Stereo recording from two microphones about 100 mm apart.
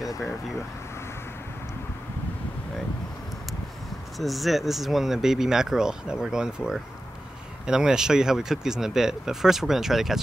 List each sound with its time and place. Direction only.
4.2 s speech: centre (ahead or behind)